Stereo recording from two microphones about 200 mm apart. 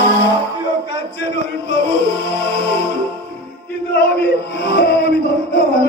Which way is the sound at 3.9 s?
55° left (ahead or behind).